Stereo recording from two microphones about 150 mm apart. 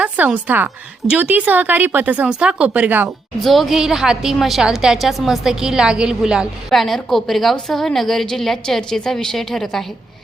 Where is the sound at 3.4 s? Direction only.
Centre (ahead or behind).